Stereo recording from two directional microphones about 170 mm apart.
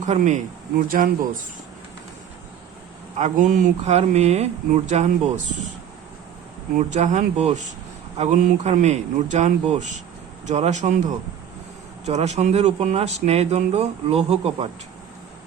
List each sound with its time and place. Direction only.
0.2 s a man's voice: 50° right (ahead or behind)
3.2 s speech: 45° right (ahead or behind)
6.7 s a man's voice: 45° right (ahead or behind)